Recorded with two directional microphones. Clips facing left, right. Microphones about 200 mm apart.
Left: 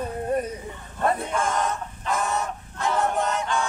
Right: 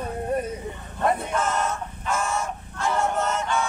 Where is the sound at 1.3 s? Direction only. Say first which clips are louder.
Even; 15° left (ahead or behind).